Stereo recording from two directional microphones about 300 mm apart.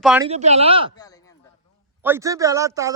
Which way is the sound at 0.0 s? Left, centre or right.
Centre.